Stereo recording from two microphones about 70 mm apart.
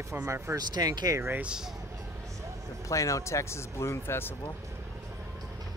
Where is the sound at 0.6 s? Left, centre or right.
Right.